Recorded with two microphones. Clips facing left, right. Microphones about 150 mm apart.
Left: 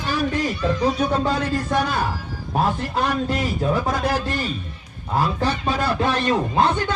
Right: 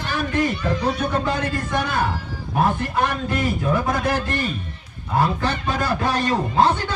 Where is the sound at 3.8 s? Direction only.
55° right (ahead or behind).